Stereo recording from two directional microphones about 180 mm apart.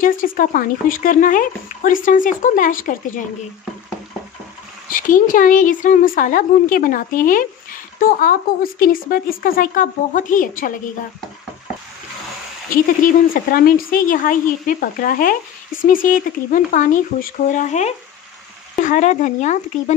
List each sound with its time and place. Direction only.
0.0 s speech: 50° left (ahead or behind)
4.8 s speech: 50° left (ahead or behind)
12.7 s speech: 50° left (ahead or behind)